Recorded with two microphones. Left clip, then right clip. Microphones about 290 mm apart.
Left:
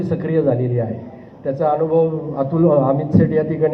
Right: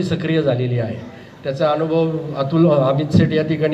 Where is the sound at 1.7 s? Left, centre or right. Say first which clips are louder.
Left 2 dB; right.